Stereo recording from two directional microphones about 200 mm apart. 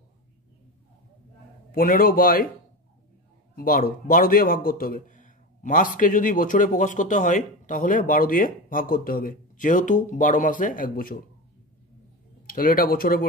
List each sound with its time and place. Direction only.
1.7 s speech: 45° left (ahead or behind)
3.5 s speech: 45° left (ahead or behind)
12.4 s speech: 45° left (ahead or behind)